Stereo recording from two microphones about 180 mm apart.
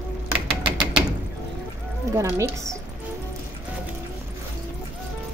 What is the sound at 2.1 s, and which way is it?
Speech, 15° right (ahead or behind).